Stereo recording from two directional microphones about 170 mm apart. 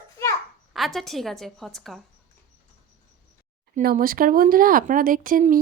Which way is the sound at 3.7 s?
55° right (ahead or behind).